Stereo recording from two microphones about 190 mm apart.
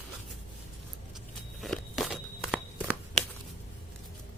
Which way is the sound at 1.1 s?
Centre (ahead or behind).